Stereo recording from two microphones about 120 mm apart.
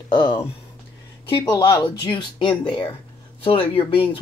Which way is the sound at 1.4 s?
30° left (ahead or behind).